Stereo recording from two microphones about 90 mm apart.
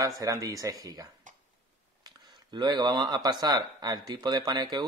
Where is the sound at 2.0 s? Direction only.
50° right (ahead or behind).